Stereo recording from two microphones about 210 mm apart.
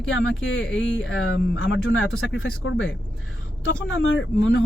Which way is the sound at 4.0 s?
65° left (ahead or behind).